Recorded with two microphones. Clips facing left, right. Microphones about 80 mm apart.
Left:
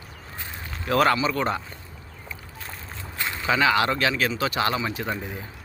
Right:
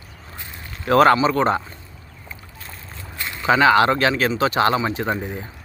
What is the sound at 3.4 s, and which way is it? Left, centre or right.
Speech, right.